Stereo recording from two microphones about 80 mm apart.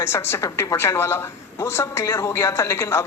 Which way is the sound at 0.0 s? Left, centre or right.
Left.